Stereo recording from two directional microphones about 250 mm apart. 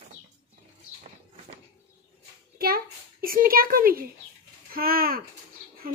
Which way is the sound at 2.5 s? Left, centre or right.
Right.